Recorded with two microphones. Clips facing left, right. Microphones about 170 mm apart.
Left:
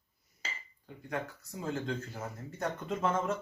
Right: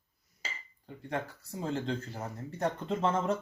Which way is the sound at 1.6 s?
30° right (ahead or behind).